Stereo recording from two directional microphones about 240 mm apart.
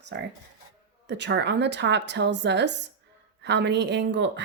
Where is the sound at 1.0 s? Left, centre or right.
Right.